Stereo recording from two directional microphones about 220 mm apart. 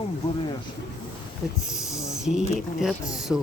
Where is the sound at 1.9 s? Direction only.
15° left (ahead or behind).